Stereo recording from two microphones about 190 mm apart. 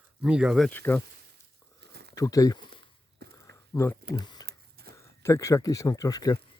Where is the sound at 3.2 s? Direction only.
55° right (ahead or behind).